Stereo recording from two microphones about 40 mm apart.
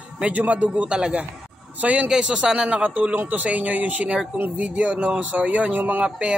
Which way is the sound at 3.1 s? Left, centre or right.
Right.